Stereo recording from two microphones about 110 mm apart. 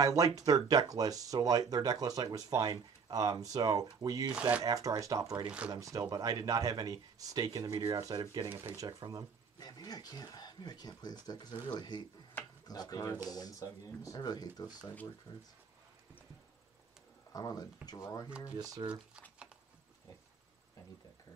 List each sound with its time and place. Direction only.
0.0 s speech: 35° right (ahead or behind)
4.3 s speech: 10° right (ahead or behind)
4.6 s speech: 30° right (ahead or behind)
8.5 s speech: 25° right (ahead or behind)
9.6 s speech: 35° left (ahead or behind)
17.3 s speech: 35° left (ahead or behind)
18.6 s speech: 35° right (ahead or behind)
19.3 s a sound: 10° right (ahead or behind)